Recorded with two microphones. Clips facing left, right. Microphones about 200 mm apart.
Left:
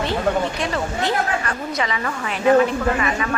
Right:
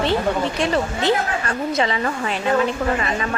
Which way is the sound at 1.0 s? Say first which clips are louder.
Right 2 dB; 30° right (ahead or behind).